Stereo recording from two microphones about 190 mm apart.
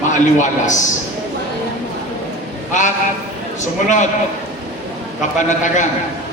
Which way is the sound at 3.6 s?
40° left (ahead or behind).